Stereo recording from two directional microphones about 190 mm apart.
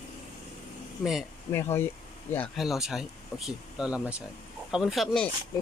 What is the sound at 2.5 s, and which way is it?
Speech, centre (ahead or behind).